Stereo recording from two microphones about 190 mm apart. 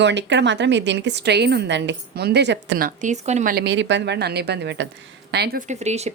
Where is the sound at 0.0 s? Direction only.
70° right (ahead or behind); by 3.5 s 40° right (ahead or behind).